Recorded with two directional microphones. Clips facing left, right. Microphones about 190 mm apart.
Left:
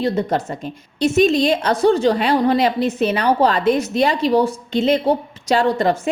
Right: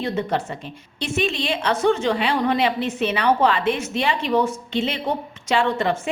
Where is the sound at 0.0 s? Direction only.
40° left (ahead or behind).